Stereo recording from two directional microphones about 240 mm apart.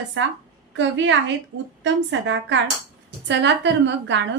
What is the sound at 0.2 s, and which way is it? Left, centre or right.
A woman's voice, right.